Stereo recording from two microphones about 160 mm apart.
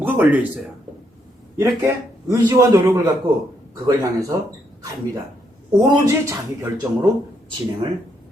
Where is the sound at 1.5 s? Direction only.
20° right (ahead or behind).